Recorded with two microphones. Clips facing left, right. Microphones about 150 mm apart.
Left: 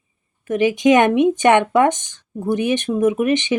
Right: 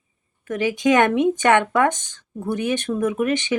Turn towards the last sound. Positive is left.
turn(degrees=20)  # may be behind; listen again after turning